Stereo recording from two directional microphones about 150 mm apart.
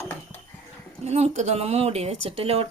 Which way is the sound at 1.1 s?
45° right (ahead or behind).